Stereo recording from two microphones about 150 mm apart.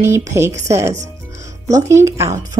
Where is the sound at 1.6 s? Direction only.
20° right (ahead or behind).